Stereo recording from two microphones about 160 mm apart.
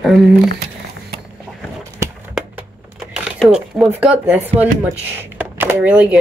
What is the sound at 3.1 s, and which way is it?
Speech, 5° right (ahead or behind).